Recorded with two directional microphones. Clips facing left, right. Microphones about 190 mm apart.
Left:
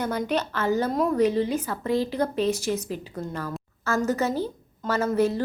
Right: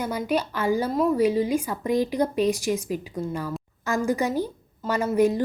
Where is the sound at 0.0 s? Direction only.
10° right (ahead or behind).